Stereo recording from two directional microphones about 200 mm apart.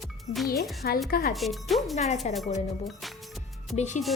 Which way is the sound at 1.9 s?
35° left (ahead or behind).